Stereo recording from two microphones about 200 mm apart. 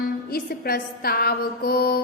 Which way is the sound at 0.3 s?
50° left (ahead or behind).